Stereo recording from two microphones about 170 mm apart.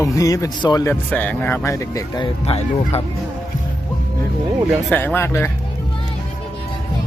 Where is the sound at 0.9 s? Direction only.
10° left (ahead or behind).